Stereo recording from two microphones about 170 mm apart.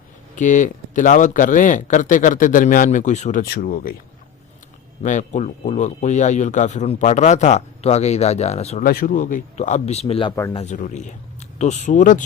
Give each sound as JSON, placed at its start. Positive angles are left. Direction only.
{"t": 0.3, "sound": "speech", "side_deg": 50}
{"t": 3.4, "sound": "speech", "side_deg": 65}
{"t": 5.0, "sound": "speech", "side_deg": 45}
{"t": 8.8, "sound": "speech", "side_deg": 60}
{"t": 10.8, "sound": "speech", "side_deg": 50}